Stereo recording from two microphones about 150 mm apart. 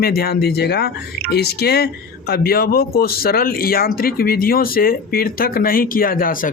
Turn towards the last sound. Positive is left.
turn(degrees=70)  # may be behind; listen again after turning